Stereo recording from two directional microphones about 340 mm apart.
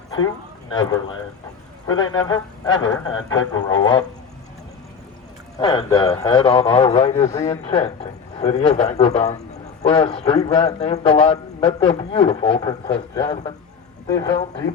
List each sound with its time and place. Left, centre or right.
0.7 s a man's voice: centre
5.5 s a man's voice: centre